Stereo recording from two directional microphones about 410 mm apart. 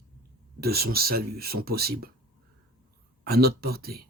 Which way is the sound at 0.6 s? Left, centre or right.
Right.